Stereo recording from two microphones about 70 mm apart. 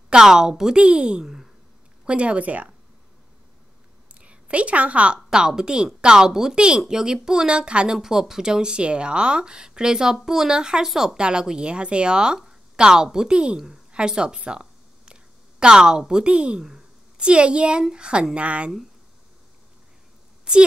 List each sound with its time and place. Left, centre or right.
0.1 s speech: centre
2.0 s speech: centre
4.1 s a woman's voice: centre
20.5 s a sound: centre